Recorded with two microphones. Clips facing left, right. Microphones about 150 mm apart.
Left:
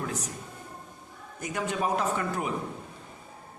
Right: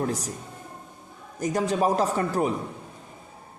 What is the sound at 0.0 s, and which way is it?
Speech, 35° right (ahead or behind).